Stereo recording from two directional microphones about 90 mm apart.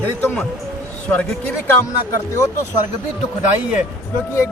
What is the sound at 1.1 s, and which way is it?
Speech, 15° left (ahead or behind).